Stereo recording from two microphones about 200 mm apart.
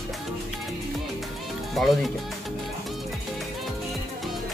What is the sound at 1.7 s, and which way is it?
Speech, centre (ahead or behind).